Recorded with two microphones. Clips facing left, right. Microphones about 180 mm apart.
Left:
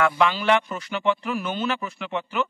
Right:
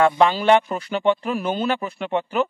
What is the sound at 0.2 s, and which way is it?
A man's voice, 30° right (ahead or behind).